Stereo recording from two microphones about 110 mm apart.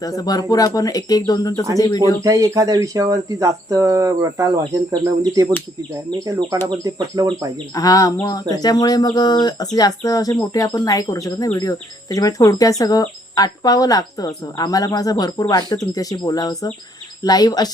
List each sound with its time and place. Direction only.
0.0 s speech: 35° left (ahead or behind)
2.2 s speech: 30° right (ahead or behind)
7.8 s speech: 30° left (ahead or behind)